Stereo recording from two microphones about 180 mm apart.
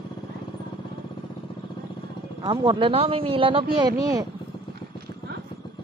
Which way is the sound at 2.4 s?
30° right (ahead or behind).